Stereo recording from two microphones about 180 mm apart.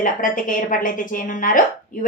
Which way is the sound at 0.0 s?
50° left (ahead or behind).